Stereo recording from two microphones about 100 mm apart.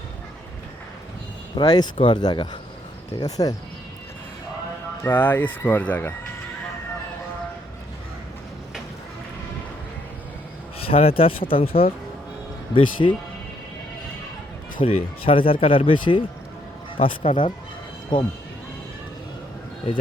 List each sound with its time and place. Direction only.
1.5 s speech: 45° left (ahead or behind)
5.0 s speech: 20° left (ahead or behind)
10.8 s speech: 70° left (ahead or behind)
12.7 s speech: 55° left (ahead or behind)
14.8 s speech: 60° left (ahead or behind)